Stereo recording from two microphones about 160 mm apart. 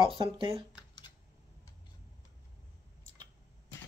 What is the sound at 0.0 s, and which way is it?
Speech, 30° right (ahead or behind).